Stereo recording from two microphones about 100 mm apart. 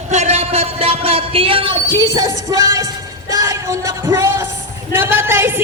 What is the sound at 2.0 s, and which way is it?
Music, 35° right (ahead or behind).